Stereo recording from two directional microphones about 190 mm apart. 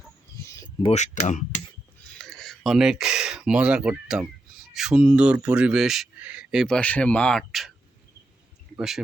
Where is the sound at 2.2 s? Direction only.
5° left (ahead or behind).